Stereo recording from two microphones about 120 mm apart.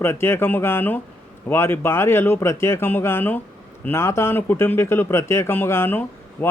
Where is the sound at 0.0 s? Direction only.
20° left (ahead or behind).